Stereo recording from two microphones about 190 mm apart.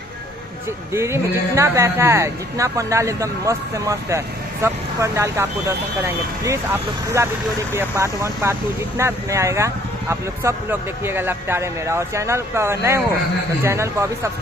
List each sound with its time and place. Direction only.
0.9 s speech: 15° right (ahead or behind)